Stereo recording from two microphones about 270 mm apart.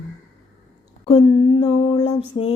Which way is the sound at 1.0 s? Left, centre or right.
Centre.